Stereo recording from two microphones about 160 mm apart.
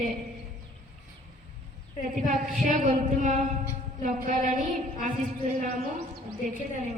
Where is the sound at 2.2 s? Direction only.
55° right (ahead or behind).